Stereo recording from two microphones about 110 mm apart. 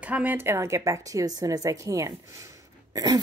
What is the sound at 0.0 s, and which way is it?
A woman's voice, 15° right (ahead or behind).